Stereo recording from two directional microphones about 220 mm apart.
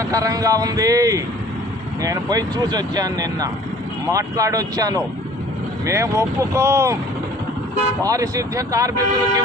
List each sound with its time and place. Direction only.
0.0 s speech: 15° right (ahead or behind)
8.0 s speech: 15° right (ahead or behind)